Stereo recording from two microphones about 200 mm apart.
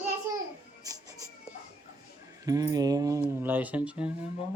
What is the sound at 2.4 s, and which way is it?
Speech, 15° right (ahead or behind).